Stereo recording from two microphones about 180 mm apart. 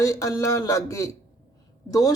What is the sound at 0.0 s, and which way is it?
Speech, 20° left (ahead or behind).